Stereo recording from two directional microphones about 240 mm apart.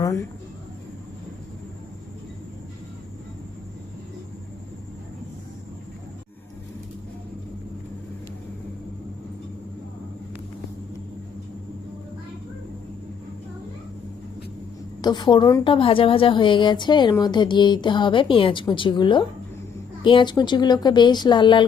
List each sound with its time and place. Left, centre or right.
15.0 s a woman's voice: centre